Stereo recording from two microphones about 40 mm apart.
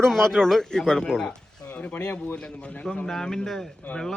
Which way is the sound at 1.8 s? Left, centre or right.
Left.